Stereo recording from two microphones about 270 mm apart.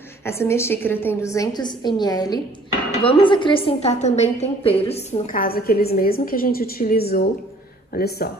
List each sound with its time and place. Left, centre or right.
0.2 s a woman's voice: centre; by 8.3 s left